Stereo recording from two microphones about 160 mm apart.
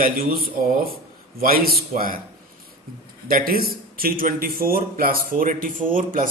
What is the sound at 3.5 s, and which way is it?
Speech, 70° right (ahead or behind).